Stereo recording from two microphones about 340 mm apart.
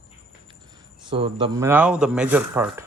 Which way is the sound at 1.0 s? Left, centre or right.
Centre.